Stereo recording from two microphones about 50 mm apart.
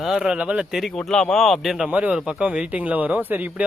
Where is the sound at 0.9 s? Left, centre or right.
Centre.